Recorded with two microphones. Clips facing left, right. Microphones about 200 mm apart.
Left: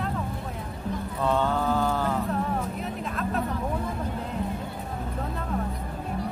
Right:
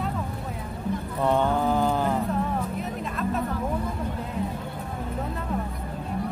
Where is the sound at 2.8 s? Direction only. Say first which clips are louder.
Right 1 dB; centre (ahead or behind).